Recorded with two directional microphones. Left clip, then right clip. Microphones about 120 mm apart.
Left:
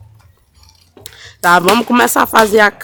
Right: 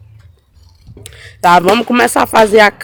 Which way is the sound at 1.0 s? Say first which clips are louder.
Right 4 dB; 5° left (ahead or behind).